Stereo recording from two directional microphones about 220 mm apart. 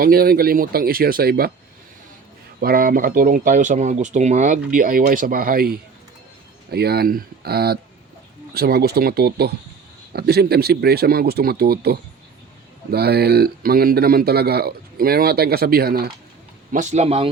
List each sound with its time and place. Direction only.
0.0 s speech: 45° right (ahead or behind)
2.6 s speech: 40° right (ahead or behind)
16.7 s speech: 30° right (ahead or behind)